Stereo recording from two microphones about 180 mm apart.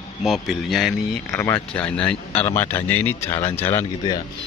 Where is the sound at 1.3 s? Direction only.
15° left (ahead or behind).